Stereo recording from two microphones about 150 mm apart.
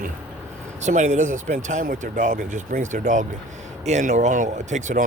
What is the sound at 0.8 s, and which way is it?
Speech, 50° right (ahead or behind).